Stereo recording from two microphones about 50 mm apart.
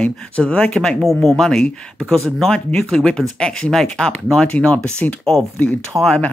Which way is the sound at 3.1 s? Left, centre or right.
Centre.